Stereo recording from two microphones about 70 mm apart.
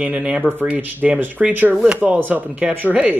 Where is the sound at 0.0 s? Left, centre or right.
Centre.